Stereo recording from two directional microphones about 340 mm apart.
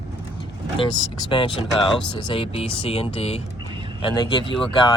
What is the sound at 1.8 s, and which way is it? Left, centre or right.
Speech, centre.